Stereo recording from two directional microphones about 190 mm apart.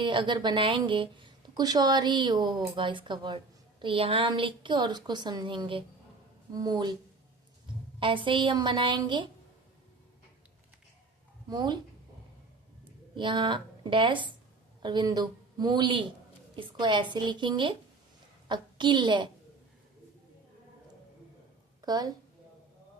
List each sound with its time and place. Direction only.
0.0 s a woman's voice: 25° right (ahead or behind)
7.9 s a woman's voice: 25° right (ahead or behind)
11.4 s a woman's voice: 20° right (ahead or behind)
13.1 s a woman's voice: 25° right (ahead or behind)
21.8 s a sound: 20° right (ahead or behind)